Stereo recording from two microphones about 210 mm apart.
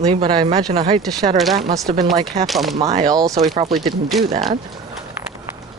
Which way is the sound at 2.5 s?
Centre (ahead or behind).